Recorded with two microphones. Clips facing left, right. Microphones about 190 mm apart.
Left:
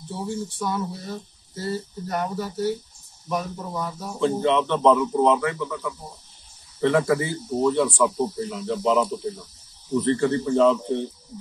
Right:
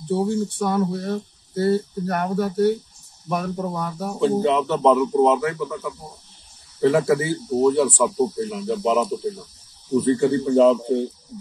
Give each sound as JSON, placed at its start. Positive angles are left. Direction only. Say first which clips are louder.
{"t": 0.1, "sound": "speech", "louder": "right 8 dB", "side_deg": -60}
{"t": 4.2, "sound": "speech", "louder": "right 2 dB", "side_deg": -5}